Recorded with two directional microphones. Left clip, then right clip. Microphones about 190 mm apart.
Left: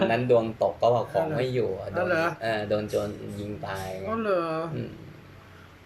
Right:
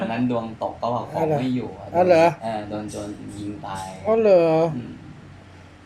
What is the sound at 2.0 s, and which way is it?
Speech, 25° right (ahead or behind).